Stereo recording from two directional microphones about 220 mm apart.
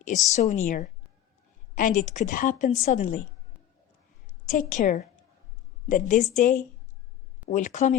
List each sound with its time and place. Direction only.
0.3 s a woman's voice: 35° left (ahead or behind)
4.5 s a woman's voice: 35° left (ahead or behind)